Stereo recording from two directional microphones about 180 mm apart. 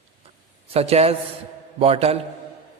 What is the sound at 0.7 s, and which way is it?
A man's voice, 35° right (ahead or behind).